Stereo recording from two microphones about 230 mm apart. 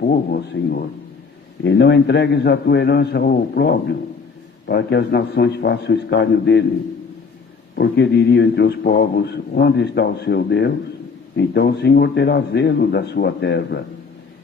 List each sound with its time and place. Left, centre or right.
0.0 s a man's voice: left
7.7 s a man's voice: left